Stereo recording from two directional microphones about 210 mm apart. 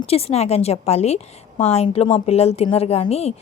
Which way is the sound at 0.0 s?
30° left (ahead or behind).